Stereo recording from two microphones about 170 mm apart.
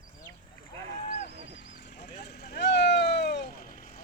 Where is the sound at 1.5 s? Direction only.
90° left; by 3.9 s 55° left (ahead or behind).